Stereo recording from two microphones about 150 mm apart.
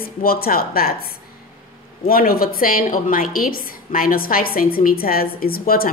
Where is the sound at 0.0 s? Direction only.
80° left.